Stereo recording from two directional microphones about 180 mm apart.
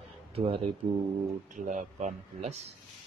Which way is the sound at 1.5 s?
45° right (ahead or behind).